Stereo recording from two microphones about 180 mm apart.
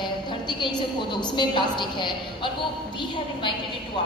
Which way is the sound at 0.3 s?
25° left (ahead or behind).